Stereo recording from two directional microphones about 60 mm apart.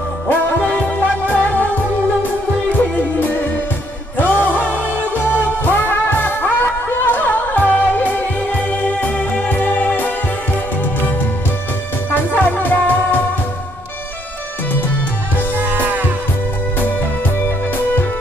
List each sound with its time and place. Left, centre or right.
0.3 s music: left
3.2 s music: left
15.5 s music: right